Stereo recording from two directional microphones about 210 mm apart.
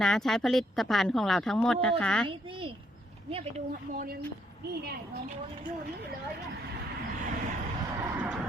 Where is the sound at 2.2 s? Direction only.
25° right (ahead or behind).